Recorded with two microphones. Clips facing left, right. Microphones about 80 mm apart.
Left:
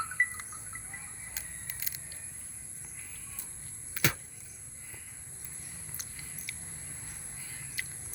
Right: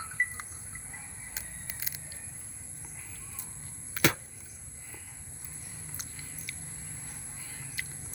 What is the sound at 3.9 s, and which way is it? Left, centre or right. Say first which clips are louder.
Arrow: right 5 dB; right.